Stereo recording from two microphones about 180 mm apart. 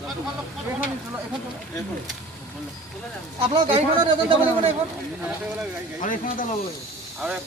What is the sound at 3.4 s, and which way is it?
Speech, 30° right (ahead or behind).